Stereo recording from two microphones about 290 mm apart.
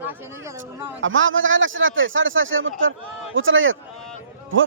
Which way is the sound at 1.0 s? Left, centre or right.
Right.